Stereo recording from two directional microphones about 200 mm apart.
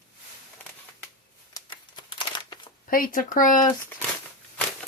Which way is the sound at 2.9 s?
45° left (ahead or behind).